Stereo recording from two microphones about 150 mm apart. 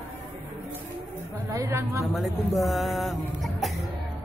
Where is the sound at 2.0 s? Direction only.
Centre (ahead or behind).